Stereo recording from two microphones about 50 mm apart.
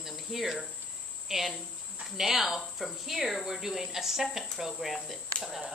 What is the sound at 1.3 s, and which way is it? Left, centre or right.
Speech, centre.